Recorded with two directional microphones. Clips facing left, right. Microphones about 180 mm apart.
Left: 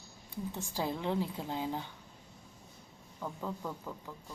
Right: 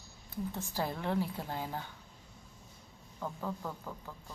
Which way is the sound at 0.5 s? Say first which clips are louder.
Left 2 dB; 10° left (ahead or behind).